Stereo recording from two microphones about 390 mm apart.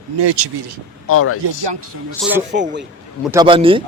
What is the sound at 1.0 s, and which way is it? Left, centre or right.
Speech, left.